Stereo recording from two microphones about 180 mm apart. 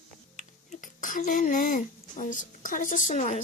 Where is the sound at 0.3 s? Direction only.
45° left (ahead or behind).